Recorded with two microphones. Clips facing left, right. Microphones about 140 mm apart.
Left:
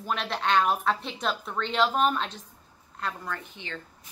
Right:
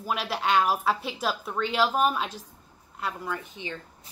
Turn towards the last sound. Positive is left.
turn(degrees=-15)  # may be behind; listen again after turning